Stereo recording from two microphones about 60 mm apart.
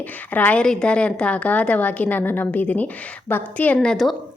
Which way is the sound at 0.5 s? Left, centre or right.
Centre.